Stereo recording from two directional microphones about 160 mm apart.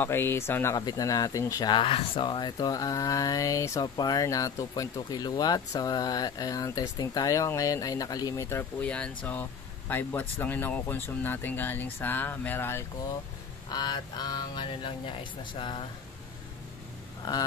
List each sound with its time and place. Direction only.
0.0 s speech: 15° left (ahead or behind)
13.7 s speech: 25° left (ahead or behind)
17.2 s a sound: 25° left (ahead or behind)